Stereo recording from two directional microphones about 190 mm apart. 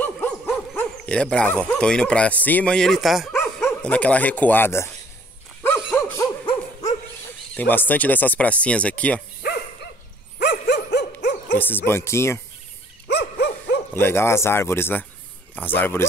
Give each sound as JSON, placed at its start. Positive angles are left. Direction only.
{"t": 0.0, "sound": "dog", "side_deg": 10}
{"t": 0.7, "sound": "speech", "side_deg": 5}
{"t": 5.9, "sound": "dog", "side_deg": 15}
{"t": 6.4, "sound": "dog", "side_deg": 35}
{"t": 7.5, "sound": "speech", "side_deg": 10}
{"t": 9.4, "sound": "dog", "side_deg": 60}
{"t": 11.5, "sound": "speech", "side_deg": 10}
{"t": 13.1, "sound": "dog", "side_deg": 60}
{"t": 13.9, "sound": "speech", "side_deg": 10}